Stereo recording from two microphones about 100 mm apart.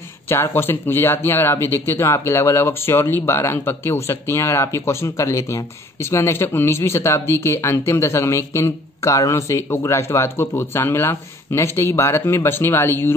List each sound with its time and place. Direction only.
0.3 s speech: 25° left (ahead or behind)